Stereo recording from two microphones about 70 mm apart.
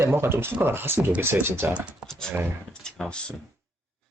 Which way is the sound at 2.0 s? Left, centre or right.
Centre.